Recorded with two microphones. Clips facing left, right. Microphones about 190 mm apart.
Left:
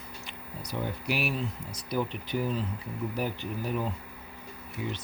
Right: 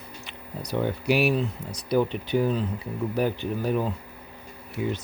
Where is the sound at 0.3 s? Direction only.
70° right (ahead or behind).